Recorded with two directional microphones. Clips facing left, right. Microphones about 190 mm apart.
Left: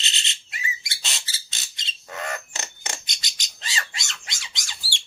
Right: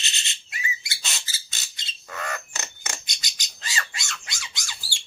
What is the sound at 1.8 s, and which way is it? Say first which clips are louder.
Bird: left 1 dB; 25° left (ahead or behind).